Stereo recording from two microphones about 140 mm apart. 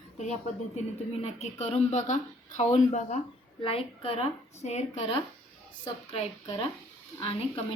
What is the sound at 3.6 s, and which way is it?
A woman's voice, 40° left (ahead or behind).